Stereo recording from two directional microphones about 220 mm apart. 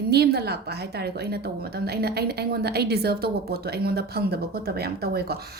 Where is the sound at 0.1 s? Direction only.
45° right (ahead or behind).